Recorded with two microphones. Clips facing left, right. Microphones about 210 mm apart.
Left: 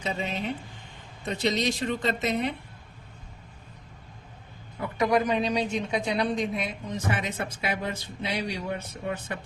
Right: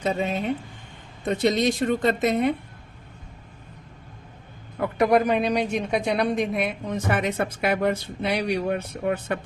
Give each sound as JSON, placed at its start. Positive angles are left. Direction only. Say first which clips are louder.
{"t": 0.0, "sound": "speech", "louder": "right 6 dB", "side_deg": -50}
{"t": 4.8, "sound": "a woman's voice", "louder": "right 5 dB", "side_deg": -55}